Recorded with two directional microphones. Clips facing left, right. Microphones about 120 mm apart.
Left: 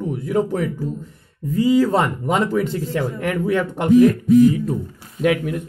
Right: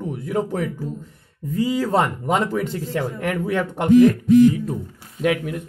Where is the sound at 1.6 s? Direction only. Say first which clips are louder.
Left 4 dB; 45° right (ahead or behind).